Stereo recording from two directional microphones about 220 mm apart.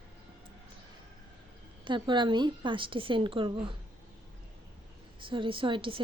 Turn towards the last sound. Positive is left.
turn(degrees=-25)  # may be behind; listen again after turning